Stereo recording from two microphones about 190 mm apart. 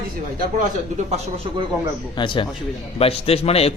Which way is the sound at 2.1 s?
25° left (ahead or behind).